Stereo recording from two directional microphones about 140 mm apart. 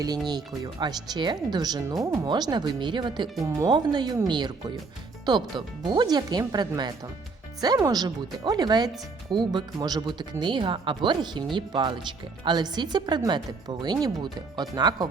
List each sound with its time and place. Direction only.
0.3 s speech: 30° right (ahead or behind)